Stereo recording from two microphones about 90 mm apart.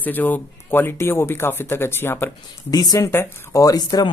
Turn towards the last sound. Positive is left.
turn(degrees=45)  # may be behind; listen again after turning